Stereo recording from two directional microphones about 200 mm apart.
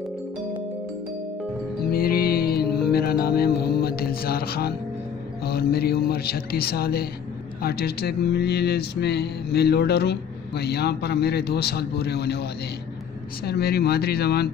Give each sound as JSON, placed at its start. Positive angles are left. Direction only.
{"t": 1.9, "sound": "music", "side_deg": 50}
{"t": 5.4, "sound": "speech", "side_deg": 50}